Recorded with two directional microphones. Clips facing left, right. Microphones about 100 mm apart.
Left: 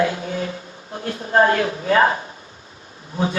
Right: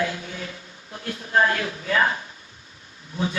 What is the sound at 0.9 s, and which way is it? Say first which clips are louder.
A man's voice: left 4 dB; 35° left (ahead or behind).